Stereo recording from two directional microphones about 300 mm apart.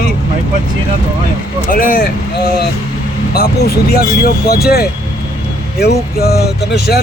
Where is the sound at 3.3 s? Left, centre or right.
Left.